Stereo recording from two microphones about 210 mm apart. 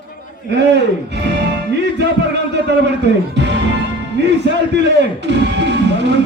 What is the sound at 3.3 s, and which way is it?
Speech, 55° right (ahead or behind).